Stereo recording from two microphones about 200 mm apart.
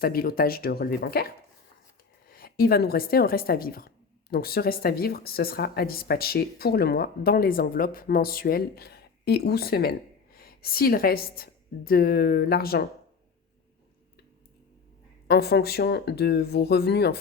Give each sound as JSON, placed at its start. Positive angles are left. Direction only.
{"t": 0.0, "sound": "a woman's voice", "side_deg": 50}
{"t": 15.3, "sound": "a woman's voice", "side_deg": 55}